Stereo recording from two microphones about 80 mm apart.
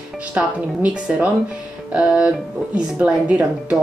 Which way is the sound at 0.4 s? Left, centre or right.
Centre.